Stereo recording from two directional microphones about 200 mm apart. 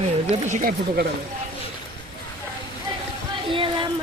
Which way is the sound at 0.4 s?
40° right (ahead or behind).